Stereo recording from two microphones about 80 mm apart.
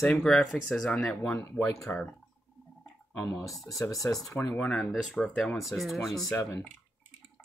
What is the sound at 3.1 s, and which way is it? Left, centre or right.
Speech, left.